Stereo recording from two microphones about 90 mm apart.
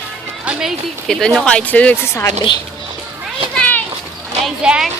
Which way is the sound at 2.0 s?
30° left (ahead or behind).